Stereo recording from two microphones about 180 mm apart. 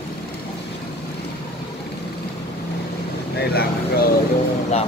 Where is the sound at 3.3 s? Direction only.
60° left (ahead or behind).